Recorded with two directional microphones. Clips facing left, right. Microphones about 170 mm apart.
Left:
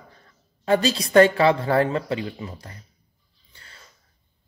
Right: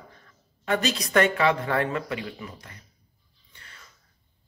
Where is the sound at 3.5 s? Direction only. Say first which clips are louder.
Left 1 dB; 30° left (ahead or behind).